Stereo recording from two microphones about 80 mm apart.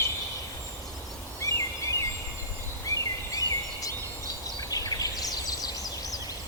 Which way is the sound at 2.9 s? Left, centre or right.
Left.